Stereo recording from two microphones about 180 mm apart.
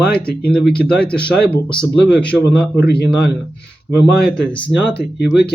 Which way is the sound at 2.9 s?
65° left (ahead or behind).